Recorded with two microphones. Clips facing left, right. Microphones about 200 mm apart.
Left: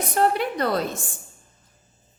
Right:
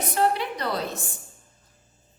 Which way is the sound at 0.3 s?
50° left (ahead or behind).